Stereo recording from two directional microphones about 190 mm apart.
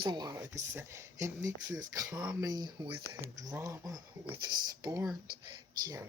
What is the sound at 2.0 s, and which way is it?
Speech, 5° right (ahead or behind).